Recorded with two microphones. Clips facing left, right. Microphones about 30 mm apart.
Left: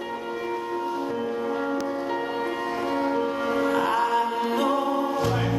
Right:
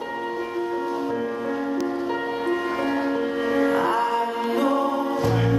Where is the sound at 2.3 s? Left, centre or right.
Right.